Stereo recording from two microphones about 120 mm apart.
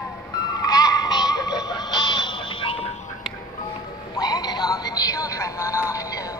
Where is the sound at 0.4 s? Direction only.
30° left (ahead or behind); by 2.9 s 50° left (ahead or behind).